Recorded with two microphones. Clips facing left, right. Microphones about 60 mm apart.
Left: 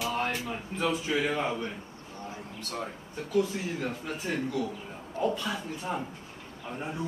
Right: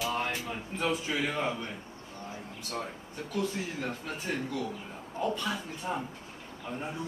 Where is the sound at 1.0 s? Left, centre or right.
Centre.